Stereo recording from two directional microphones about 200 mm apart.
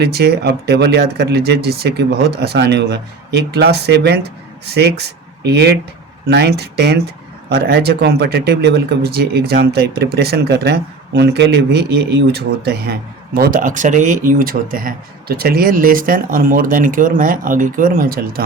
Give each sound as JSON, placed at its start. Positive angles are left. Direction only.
{"t": 0.0, "sound": "speech", "side_deg": -55}